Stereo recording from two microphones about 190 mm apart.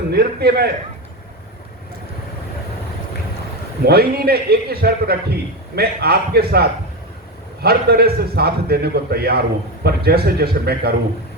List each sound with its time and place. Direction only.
0.1 s a man's voice: 55° right (ahead or behind)
3.8 s a man's voice: 55° right (ahead or behind)